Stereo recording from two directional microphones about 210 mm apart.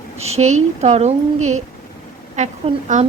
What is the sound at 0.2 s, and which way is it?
Speech, 30° right (ahead or behind).